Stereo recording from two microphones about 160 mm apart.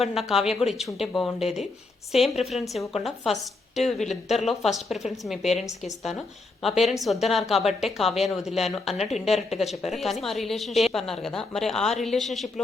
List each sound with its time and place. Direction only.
0.0 s a woman's voice: centre (ahead or behind)